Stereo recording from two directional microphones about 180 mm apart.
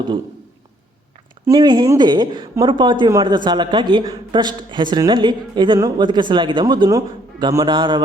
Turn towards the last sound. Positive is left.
turn(degrees=-25)  # may be behind; listen again after turning